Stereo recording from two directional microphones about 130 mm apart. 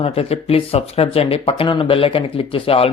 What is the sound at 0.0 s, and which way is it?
Speech, 45° left (ahead or behind).